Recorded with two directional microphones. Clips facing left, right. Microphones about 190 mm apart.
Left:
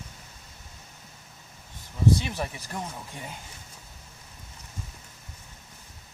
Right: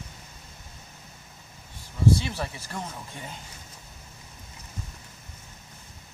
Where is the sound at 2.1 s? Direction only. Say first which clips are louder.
Even; 15° left (ahead or behind).